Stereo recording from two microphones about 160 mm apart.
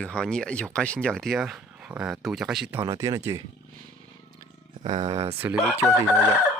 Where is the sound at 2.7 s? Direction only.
20° right (ahead or behind).